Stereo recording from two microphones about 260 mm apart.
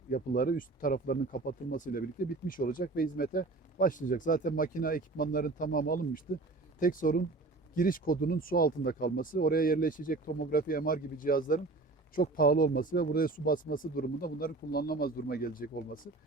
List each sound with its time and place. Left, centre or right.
0.1 s speech: left